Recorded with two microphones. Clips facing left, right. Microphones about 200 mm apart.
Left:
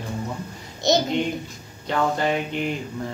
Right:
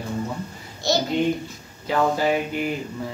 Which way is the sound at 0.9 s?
20° left (ahead or behind).